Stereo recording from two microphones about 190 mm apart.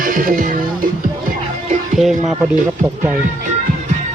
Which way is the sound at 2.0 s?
Centre (ahead or behind).